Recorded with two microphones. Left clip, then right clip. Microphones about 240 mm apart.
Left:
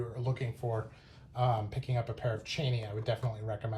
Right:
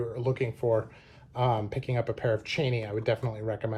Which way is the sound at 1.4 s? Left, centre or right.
Right.